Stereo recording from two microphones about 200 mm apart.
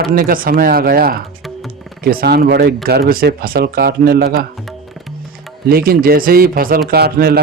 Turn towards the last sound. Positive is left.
turn(degrees=-50)  # may be behind; listen again after turning